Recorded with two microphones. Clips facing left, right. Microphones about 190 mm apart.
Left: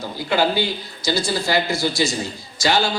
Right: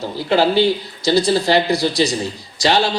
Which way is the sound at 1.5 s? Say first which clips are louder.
Right 5 dB; 35° right (ahead or behind).